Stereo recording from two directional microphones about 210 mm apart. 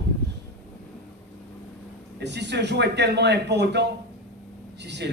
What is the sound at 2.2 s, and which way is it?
A man's voice, 55° right (ahead or behind).